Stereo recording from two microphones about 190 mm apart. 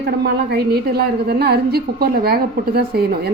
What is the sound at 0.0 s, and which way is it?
A woman's voice, 55° right (ahead or behind).